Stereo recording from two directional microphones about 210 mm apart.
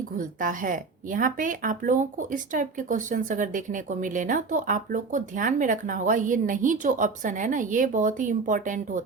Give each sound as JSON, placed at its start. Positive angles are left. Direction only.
{"t": 0.2, "sound": "speech", "side_deg": -40}